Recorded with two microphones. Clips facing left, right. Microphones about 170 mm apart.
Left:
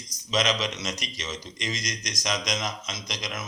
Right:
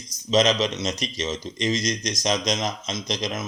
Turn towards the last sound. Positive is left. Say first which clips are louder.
# right 7 dB
turn(degrees=-25)  # may be behind; listen again after turning